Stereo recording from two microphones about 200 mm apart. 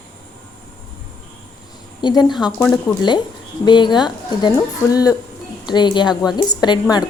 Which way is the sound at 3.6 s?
20° left (ahead or behind).